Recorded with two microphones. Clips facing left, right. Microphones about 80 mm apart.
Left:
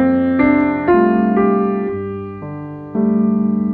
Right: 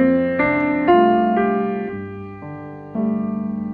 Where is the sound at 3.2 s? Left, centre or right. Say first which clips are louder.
Left 8 dB; centre.